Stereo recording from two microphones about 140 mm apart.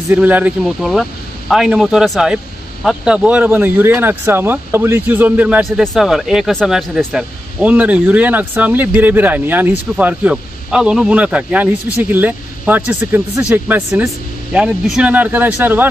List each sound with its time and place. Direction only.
0.1 s speech: 10° right (ahead or behind)
0.7 s speech: centre (ahead or behind)